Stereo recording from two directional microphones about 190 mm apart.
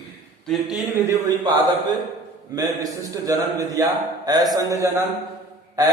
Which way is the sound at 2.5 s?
20° right (ahead or behind).